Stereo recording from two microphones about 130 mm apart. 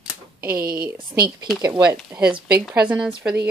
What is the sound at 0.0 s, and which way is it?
Typewriter, 10° right (ahead or behind).